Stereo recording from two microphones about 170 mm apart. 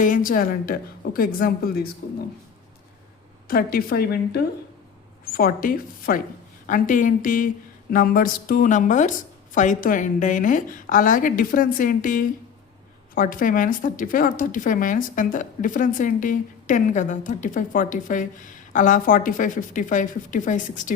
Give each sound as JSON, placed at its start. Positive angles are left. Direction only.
{"t": 0.0, "sound": "a woman's voice", "side_deg": 55}
{"t": 3.5, "sound": "a woman's voice", "side_deg": 60}